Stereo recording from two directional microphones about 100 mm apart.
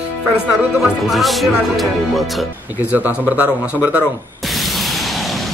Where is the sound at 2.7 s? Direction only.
15° right (ahead or behind).